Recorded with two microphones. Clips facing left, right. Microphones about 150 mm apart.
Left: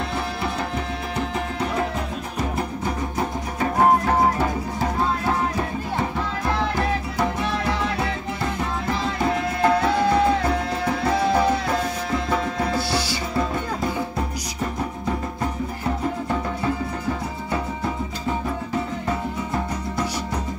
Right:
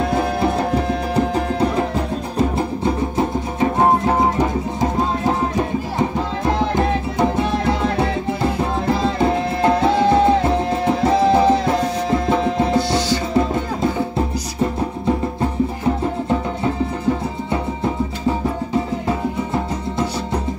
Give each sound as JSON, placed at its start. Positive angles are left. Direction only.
{"t": 1.1, "sound": "music", "side_deg": -35}